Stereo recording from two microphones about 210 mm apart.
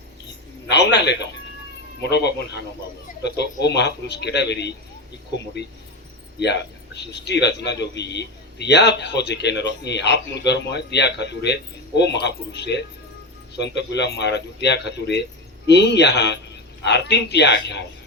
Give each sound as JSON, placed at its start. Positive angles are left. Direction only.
{"t": 0.7, "sound": "a man's voice", "side_deg": 55}